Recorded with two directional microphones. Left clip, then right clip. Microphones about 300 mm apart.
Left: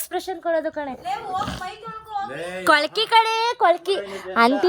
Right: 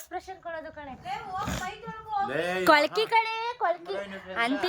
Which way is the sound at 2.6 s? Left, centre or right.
Centre.